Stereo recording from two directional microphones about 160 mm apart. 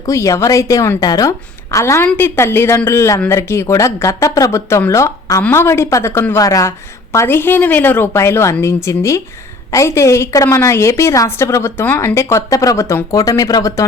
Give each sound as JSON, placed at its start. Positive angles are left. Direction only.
{"t": 0.0, "sound": "a woman's voice", "side_deg": 20}